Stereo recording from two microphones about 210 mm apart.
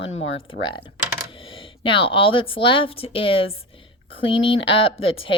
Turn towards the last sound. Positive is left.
turn(degrees=25)  # may be behind; listen again after turning